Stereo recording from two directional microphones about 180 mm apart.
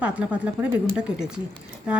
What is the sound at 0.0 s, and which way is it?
A woman's voice, 5° right (ahead or behind).